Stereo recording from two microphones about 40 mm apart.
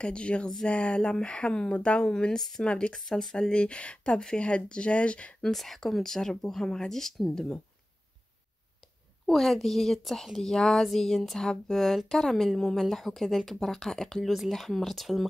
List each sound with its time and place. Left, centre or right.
0.0 s speech: left
2.9 s a woman's voice: centre
3.5 s speech: left
5.4 s a woman's voice: centre; by 7.6 s left
9.2 s a woman's voice: centre